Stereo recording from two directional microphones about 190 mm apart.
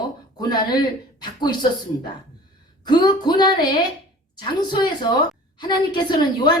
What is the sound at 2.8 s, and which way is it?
A woman's voice, 20° left (ahead or behind).